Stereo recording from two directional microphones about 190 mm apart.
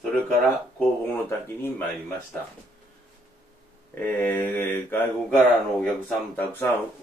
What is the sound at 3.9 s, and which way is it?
Speech, 10° left (ahead or behind).